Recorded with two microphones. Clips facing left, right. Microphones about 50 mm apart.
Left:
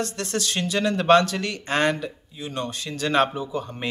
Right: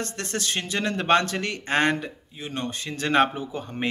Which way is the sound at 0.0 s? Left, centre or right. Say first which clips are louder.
Left 3 dB; right.